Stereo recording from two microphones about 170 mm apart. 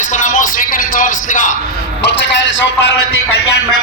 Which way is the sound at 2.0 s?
90° left.